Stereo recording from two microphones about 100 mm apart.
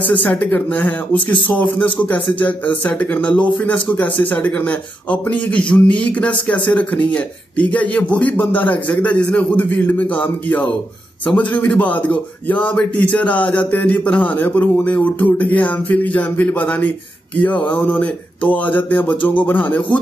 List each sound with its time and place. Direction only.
0.1 s speech: 15° left (ahead or behind)